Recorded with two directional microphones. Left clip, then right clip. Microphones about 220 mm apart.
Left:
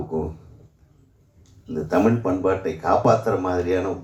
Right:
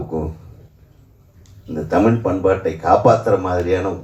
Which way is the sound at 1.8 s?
50° left (ahead or behind).